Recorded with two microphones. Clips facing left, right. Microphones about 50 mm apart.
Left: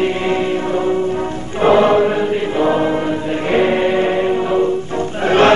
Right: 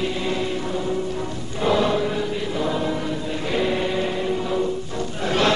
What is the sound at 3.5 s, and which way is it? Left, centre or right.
Music, left.